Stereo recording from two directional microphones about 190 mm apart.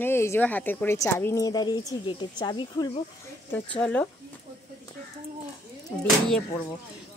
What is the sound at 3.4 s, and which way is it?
Speech, 5° left (ahead or behind).